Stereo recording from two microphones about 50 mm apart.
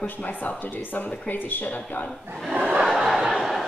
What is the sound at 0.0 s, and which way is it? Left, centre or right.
Speech, left.